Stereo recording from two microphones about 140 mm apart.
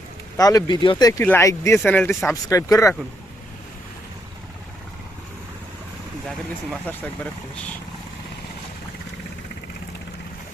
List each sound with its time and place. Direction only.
0.3 s speech: 25° left (ahead or behind)
1.2 s speech: 15° left (ahead or behind)
6.9 s speech: 10° left (ahead or behind)